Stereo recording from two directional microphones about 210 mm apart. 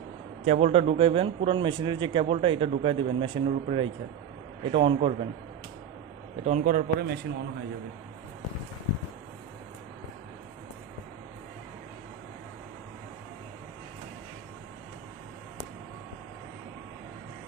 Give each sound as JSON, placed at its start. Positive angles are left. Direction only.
{"t": 0.4, "sound": "a man's voice", "side_deg": -30}
{"t": 6.4, "sound": "a man's voice", "side_deg": -35}